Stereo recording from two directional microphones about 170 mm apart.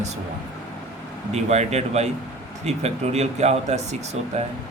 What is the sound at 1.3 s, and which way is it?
Speech, 40° right (ahead or behind).